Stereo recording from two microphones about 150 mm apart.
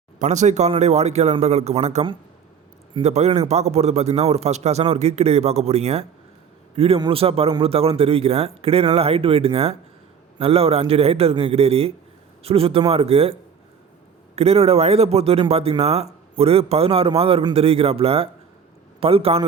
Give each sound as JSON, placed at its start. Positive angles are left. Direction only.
{"t": 0.2, "sound": "a man's voice", "side_deg": -50}
{"t": 14.3, "sound": "a man's voice", "side_deg": -45}